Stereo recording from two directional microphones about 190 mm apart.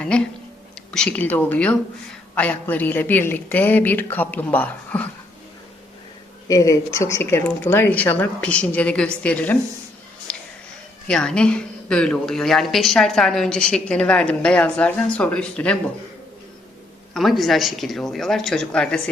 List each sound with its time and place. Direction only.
0.1 s a woman's voice: 5° left (ahead or behind)
6.5 s speech: 15° left (ahead or behind)
10.3 s music: 5° left (ahead or behind)
11.1 s a woman's voice: 5° left (ahead or behind)
17.2 s a woman's voice: centre (ahead or behind)